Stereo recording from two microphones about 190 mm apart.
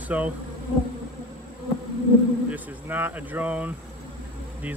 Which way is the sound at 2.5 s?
10° right (ahead or behind).